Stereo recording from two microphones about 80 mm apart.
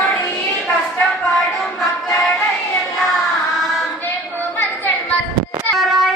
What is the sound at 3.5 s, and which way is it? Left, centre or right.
Child singing, centre.